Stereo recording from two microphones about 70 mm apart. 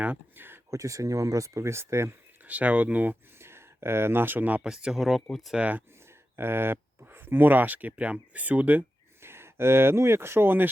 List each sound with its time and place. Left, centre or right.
0.3 s a sound: right
0.7 s speech: right
2.4 s speech: right
3.3 s speech: right
4.6 s speech: centre
5.5 s speech: right
6.1 s speech: right
9.2 s speech: right